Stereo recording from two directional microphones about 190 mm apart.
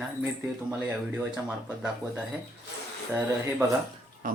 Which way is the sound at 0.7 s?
5° right (ahead or behind).